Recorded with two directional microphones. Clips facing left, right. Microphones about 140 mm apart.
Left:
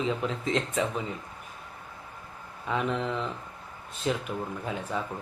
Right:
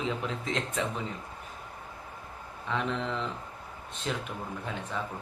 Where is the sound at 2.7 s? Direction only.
5° left (ahead or behind).